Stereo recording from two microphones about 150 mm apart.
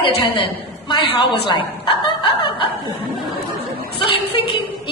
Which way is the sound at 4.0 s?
35° left (ahead or behind).